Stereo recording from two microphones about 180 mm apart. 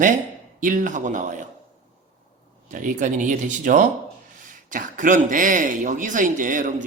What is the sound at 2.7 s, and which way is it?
Speech, 45° right (ahead or behind).